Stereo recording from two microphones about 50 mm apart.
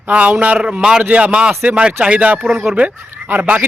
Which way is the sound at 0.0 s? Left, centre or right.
Right.